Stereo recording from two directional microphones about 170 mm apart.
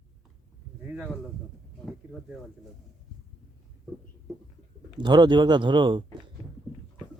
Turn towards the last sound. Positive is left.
turn(degrees=-25)  # may be behind; listen again after turning